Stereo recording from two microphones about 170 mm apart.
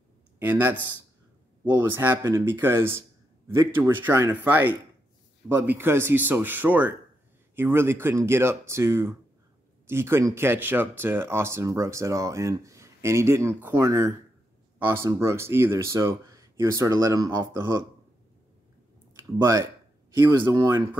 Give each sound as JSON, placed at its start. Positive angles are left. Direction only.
{"t": 0.4, "sound": "speech", "side_deg": -10}
{"t": 19.1, "sound": "speech", "side_deg": -20}